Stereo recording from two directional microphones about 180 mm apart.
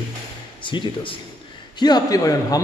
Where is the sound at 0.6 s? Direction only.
25° left (ahead or behind).